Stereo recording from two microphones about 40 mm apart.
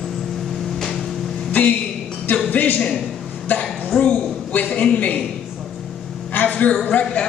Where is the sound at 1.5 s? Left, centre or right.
Left.